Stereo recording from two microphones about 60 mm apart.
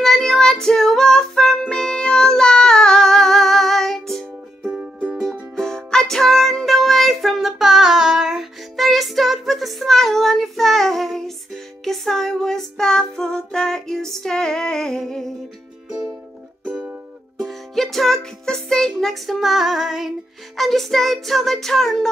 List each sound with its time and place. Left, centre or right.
0.0 s child singing: centre
4.6 s music: right
5.6 s music: centre
17.4 s music: centre
20.5 s a sound: centre